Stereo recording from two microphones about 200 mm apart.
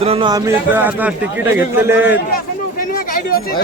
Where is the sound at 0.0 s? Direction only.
25° right (ahead or behind); by 2.1 s 10° right (ahead or behind).